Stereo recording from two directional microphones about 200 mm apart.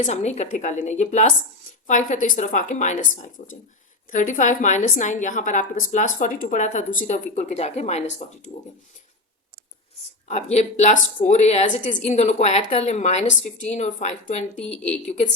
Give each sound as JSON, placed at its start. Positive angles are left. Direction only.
{"t": 0.0, "sound": "a woman's voice", "side_deg": 35}
{"t": 10.2, "sound": "a woman's voice", "side_deg": 35}
{"t": 14.6, "sound": "speech", "side_deg": 5}
{"t": 15.0, "sound": "a woman's voice", "side_deg": 35}